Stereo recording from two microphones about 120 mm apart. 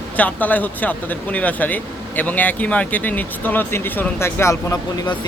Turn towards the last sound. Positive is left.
turn(degrees=25)  # may be behind; listen again after turning